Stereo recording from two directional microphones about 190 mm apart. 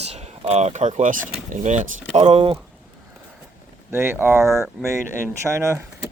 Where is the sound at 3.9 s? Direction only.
10° right (ahead or behind).